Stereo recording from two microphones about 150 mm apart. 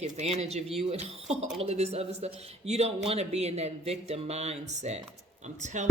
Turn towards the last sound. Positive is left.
turn(degrees=-50)  # may be behind; listen again after turning